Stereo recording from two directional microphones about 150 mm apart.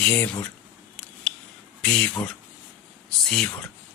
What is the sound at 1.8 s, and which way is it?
Speech, 5° left (ahead or behind).